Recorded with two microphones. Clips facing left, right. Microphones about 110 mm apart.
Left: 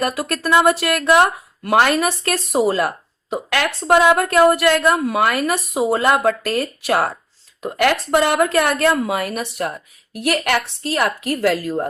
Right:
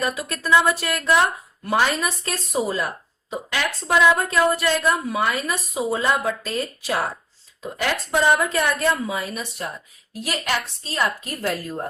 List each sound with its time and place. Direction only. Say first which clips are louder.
0.0 s a woman's voice: left 5 dB; 65° left (ahead or behind)